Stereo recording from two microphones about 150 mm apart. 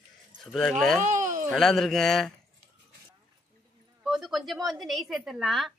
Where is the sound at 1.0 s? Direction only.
55° right (ahead or behind).